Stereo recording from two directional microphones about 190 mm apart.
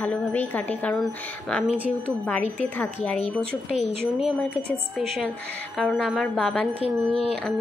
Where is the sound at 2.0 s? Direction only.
5° left (ahead or behind).